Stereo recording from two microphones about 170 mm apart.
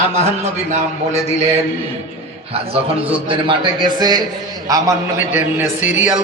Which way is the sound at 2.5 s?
35° right (ahead or behind).